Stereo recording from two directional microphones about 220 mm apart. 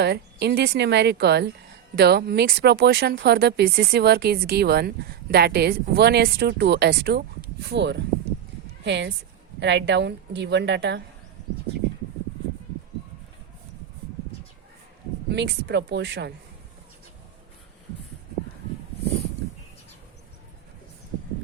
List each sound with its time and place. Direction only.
0.0 s a woman's voice: 50° right (ahead or behind)
15.3 s speech: 50° right (ahead or behind)